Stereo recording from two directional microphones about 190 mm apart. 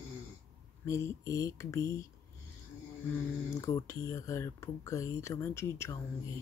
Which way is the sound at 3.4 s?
15° left (ahead or behind).